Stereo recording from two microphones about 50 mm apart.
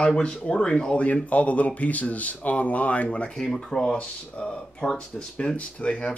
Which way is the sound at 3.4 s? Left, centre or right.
Centre.